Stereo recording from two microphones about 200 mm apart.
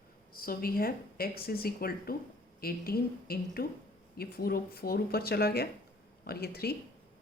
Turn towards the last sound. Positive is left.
turn(degrees=50)  # may be behind; listen again after turning